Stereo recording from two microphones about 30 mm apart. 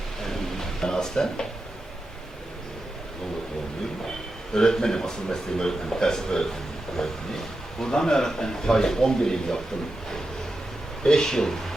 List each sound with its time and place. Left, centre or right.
0.2 s a sound: centre
4.5 s speech: left
11.0 s speech: left